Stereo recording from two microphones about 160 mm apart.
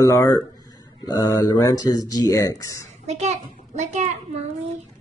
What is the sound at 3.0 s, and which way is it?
A child's voice, 45° right (ahead or behind).